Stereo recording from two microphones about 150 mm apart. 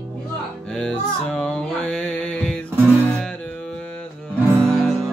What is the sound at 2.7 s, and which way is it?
Music, 15° right (ahead or behind).